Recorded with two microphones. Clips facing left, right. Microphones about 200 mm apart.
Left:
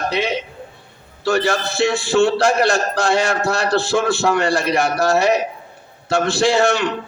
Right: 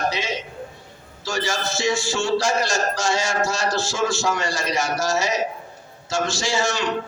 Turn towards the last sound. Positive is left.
turn(degrees=60)  # may be behind; listen again after turning